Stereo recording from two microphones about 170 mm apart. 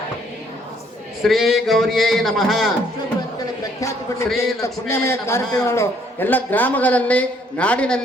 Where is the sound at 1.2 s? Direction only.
Centre (ahead or behind).